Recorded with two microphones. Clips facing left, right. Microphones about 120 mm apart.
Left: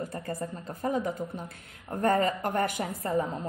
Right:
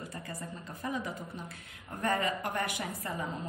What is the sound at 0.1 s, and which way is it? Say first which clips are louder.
Speech: left 7 dB; 50° left (ahead or behind).